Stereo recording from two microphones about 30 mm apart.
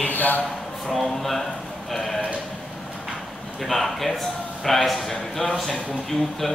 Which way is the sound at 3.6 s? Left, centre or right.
Centre.